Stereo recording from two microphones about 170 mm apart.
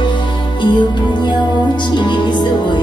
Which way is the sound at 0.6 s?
25° left (ahead or behind).